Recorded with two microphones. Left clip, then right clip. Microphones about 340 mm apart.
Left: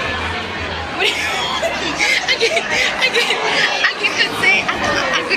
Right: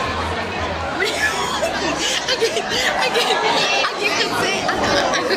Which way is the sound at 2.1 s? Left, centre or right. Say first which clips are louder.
Left 6 dB; centre.